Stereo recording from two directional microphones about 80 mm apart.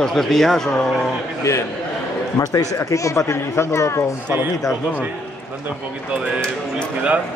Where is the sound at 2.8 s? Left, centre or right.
Left.